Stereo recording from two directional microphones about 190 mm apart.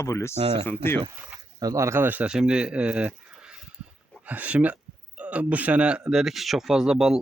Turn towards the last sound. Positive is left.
turn(degrees=0)  # may be behind; listen again after turning